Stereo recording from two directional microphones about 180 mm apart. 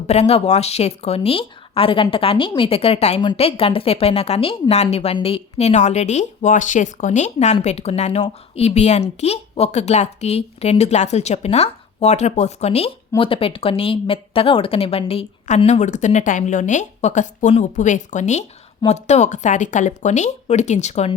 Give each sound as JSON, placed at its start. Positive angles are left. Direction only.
{"t": 0.1, "sound": "a woman's voice", "side_deg": 35}